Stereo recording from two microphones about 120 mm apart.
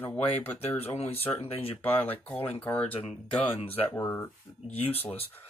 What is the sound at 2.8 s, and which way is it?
Speech, 55° left (ahead or behind).